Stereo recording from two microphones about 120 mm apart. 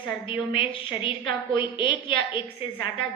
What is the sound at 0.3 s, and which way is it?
A woman's voice, 45° left (ahead or behind).